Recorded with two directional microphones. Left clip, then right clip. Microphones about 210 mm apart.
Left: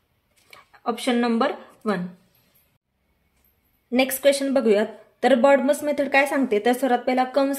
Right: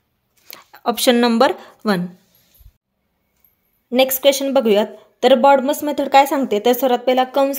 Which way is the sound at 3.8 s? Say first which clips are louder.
Right 5 dB; 30° right (ahead or behind).